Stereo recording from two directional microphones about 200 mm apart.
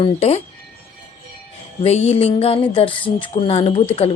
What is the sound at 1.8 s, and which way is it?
Speech, 30° left (ahead or behind).